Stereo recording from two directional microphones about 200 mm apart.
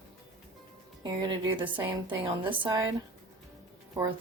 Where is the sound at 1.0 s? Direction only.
20° right (ahead or behind).